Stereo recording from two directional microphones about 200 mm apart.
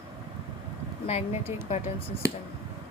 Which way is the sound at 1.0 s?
30° left (ahead or behind).